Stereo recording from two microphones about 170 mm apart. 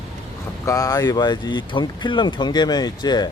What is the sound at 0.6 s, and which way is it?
Speech, 20° left (ahead or behind).